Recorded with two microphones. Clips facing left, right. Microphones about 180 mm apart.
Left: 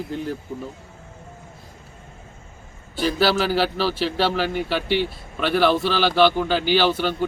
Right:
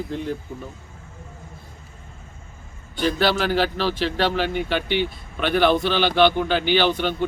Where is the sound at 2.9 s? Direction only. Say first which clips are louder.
Left 1 dB; 5° left (ahead or behind).